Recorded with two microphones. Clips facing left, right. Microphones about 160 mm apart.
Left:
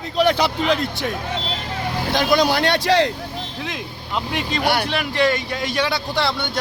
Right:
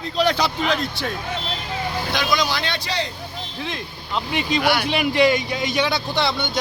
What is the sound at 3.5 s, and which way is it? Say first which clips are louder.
Speech: left 1 dB; 5° left (ahead or behind).